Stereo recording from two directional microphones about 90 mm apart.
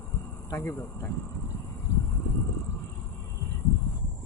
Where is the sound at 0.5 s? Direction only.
30° left (ahead or behind).